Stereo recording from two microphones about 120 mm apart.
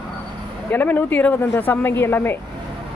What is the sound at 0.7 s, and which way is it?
Speech, 15° left (ahead or behind).